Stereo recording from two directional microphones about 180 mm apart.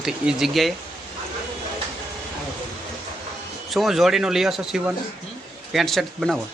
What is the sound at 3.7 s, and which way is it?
A man's voice, centre (ahead or behind).